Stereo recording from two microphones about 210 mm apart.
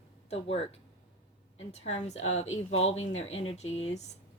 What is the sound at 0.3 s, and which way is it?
A woman's voice, 30° left (ahead or behind).